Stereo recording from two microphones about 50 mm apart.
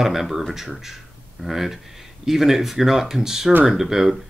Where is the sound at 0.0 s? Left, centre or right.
Centre.